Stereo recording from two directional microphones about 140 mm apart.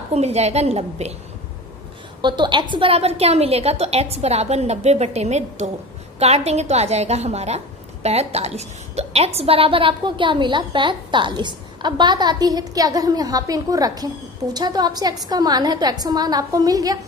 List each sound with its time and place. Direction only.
0.1 s a woman's voice: 50° right (ahead or behind)
2.2 s a woman's voice: 35° right (ahead or behind)